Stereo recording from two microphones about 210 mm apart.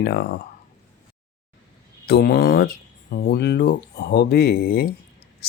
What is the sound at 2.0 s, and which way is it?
Speech, 50° left (ahead or behind).